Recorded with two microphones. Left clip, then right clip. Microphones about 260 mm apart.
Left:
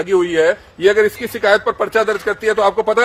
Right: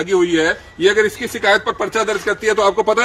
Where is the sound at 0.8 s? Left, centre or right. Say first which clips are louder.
Even; left.